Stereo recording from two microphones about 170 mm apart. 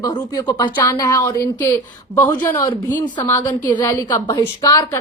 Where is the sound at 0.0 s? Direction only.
20° left (ahead or behind).